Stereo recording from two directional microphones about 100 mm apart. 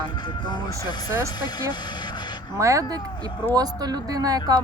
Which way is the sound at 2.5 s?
30° right (ahead or behind).